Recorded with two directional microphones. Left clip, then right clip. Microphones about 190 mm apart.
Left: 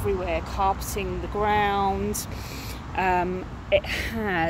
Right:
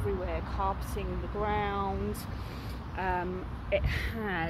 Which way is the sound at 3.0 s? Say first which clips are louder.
Left 9 dB; 50° left (ahead or behind).